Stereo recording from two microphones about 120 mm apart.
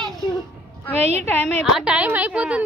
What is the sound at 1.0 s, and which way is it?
Speech, 60° right (ahead or behind).